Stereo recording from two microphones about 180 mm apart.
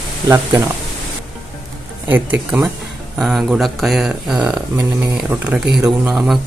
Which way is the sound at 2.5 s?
5° right (ahead or behind).